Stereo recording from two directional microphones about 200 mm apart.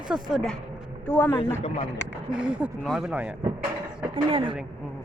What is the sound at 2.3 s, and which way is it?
Speech, 5° right (ahead or behind).